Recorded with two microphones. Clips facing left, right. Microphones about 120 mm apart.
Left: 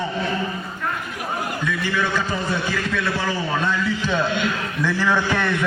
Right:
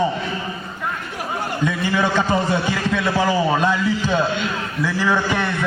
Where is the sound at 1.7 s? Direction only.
30° right (ahead or behind).